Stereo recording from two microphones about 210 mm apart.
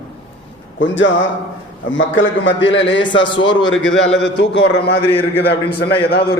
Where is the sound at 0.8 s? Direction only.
60° left (ahead or behind).